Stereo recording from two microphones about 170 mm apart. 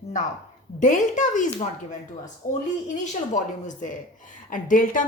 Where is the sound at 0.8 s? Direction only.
45° left (ahead or behind).